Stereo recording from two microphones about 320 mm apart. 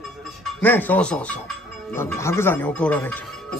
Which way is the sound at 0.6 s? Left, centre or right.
Centre.